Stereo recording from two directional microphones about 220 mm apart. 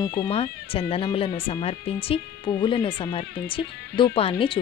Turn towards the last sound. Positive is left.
turn(degrees=25)  # may be behind; listen again after turning